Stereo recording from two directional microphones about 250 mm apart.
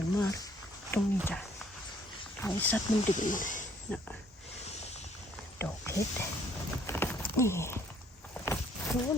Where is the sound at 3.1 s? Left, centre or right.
Left.